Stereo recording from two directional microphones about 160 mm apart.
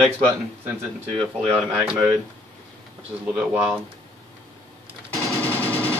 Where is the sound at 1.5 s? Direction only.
10° right (ahead or behind).